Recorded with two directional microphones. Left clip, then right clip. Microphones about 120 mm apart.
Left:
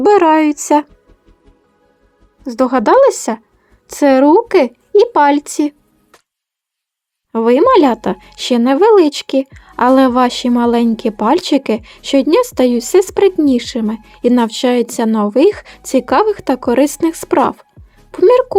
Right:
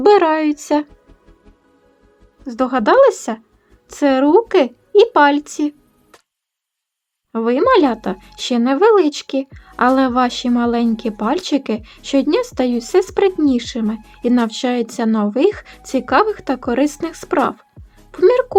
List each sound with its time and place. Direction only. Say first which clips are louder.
0.0 s speech: left 3 dB; 35° left (ahead or behind)
2.4 s speech: left 4 dB; 35° left (ahead or behind)
7.3 s speech: left 4 dB; 45° left (ahead or behind)